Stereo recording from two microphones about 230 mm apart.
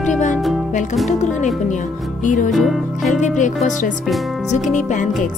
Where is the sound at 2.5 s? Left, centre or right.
Centre.